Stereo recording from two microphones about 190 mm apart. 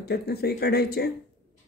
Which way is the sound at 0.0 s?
55° left (ahead or behind).